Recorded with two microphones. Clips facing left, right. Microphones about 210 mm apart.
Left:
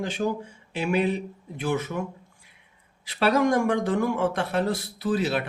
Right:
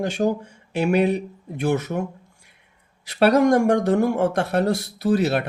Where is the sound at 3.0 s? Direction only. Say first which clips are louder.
Right 5 dB; 45° right (ahead or behind).